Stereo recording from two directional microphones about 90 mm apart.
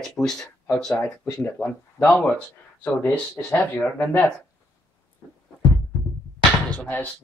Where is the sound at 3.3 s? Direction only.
20° left (ahead or behind).